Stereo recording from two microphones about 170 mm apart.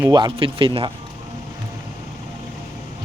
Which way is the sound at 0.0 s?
25° right (ahead or behind).